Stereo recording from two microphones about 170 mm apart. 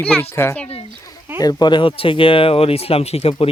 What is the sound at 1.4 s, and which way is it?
Speech, 25° left (ahead or behind).